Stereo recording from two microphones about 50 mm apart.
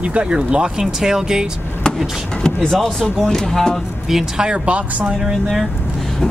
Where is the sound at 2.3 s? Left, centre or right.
Centre.